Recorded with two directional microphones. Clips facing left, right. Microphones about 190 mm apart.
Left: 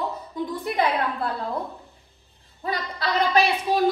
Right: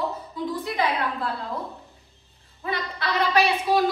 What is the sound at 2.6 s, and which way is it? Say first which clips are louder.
Speech: left 1 dB; 35° left (ahead or behind).